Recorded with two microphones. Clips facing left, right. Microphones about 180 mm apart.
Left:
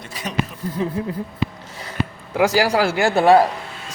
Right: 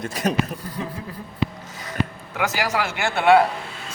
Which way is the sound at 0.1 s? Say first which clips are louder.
Right 6 dB; 45° right (ahead or behind).